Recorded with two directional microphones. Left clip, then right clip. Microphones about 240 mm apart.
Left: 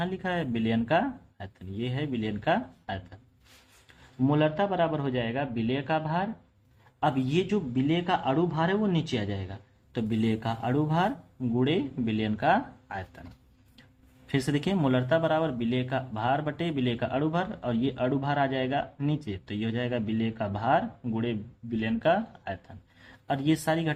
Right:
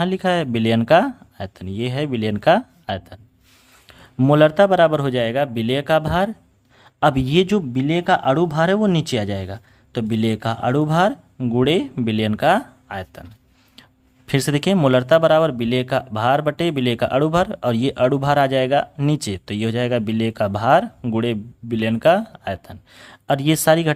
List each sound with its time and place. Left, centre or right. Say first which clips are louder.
0.0 s a man's voice: right 11 dB; right
14.3 s a man's voice: right 9 dB; right